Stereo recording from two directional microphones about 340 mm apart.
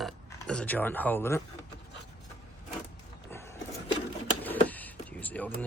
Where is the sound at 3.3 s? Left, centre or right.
Centre.